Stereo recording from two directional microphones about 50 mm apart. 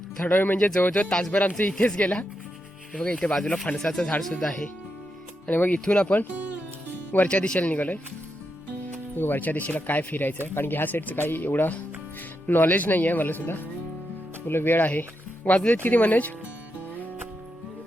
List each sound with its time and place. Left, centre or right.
0.3 s speech: left
0.9 s speech: centre
1.3 s speech: left; by 4.6 s centre
5.5 s speech: left
7.3 s speech: left
7.7 s speech: left
9.1 s speech: left
10.4 s speech: left
15.4 s speech: left